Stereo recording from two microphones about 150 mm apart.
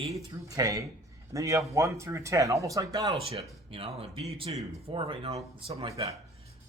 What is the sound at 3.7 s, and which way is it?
Speech, 40° right (ahead or behind).